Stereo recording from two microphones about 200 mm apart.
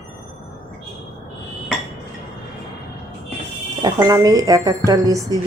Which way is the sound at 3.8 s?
15° right (ahead or behind).